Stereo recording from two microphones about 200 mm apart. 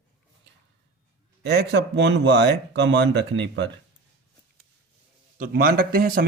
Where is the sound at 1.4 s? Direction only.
55° right (ahead or behind).